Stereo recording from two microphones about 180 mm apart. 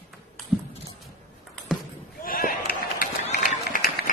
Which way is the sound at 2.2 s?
50° left (ahead or behind).